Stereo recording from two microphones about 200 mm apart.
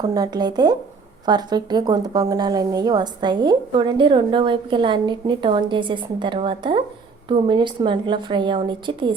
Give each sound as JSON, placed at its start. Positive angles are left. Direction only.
{"t": 0.0, "sound": "a woman's voice", "side_deg": -20}